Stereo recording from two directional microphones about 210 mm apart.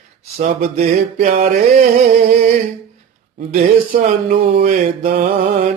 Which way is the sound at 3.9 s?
35° right (ahead or behind).